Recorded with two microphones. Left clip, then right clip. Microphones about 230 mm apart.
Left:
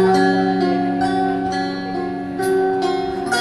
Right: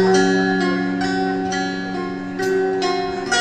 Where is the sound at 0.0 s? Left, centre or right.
Right.